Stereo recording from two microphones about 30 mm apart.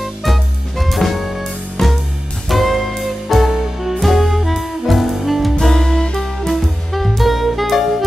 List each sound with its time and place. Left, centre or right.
0.0 s music: centre
5.6 s music: centre
6.5 s music: centre